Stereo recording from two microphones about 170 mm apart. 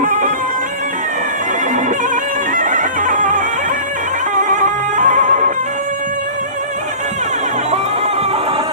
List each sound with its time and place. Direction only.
0.0 s music: 50° right (ahead or behind)
2.6 s bagpipes: 50° right (ahead or behind)
4.4 s music: 50° right (ahead or behind)